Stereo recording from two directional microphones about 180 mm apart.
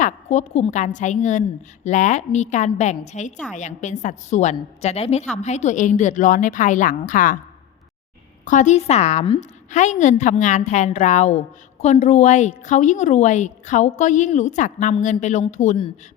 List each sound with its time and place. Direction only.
0.0 s a woman's voice: 40° left (ahead or behind)
8.4 s a woman's voice: 45° left (ahead or behind)